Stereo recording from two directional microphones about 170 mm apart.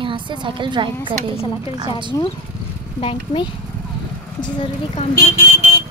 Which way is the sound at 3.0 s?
35° left (ahead or behind).